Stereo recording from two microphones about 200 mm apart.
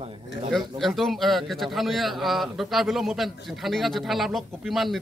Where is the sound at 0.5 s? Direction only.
Centre (ahead or behind).